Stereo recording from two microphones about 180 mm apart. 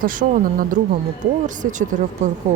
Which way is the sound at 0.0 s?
50° right (ahead or behind).